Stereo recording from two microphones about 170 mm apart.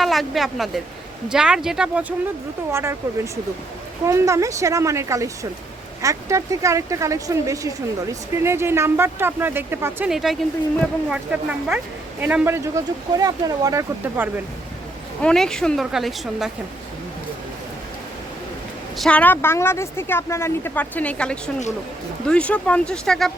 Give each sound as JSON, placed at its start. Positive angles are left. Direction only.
{"t": 0.0, "sound": "speech", "side_deg": 0}
{"t": 4.0, "sound": "speech", "side_deg": -20}
{"t": 15.2, "sound": "speech", "side_deg": 5}
{"t": 18.9, "sound": "a woman's voice", "side_deg": 5}